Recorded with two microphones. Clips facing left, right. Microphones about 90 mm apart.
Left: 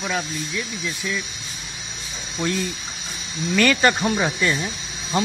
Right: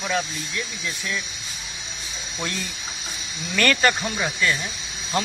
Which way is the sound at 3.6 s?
15° left (ahead or behind).